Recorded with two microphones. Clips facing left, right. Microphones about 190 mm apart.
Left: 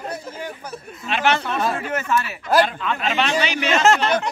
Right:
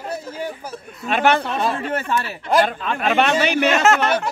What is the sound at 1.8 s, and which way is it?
Speech, 30° right (ahead or behind).